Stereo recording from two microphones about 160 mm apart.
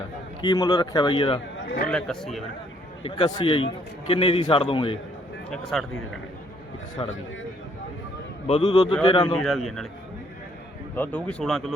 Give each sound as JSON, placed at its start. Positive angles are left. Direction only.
{"t": 0.4, "sound": "speech", "side_deg": 25}
{"t": 1.9, "sound": "a man's voice", "side_deg": 5}
{"t": 3.2, "sound": "a man's voice", "side_deg": 30}
{"t": 5.7, "sound": "a man's voice", "side_deg": 0}
{"t": 7.0, "sound": "a man's voice", "side_deg": 35}
{"t": 8.4, "sound": "a man's voice", "side_deg": 35}
{"t": 9.3, "sound": "a man's voice", "side_deg": 0}
{"t": 10.9, "sound": "speech", "side_deg": 10}